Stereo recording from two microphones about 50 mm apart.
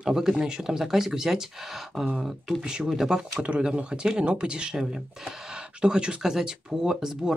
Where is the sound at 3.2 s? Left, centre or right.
Right.